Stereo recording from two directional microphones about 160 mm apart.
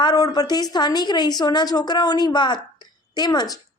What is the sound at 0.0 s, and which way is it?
Speech, 25° left (ahead or behind).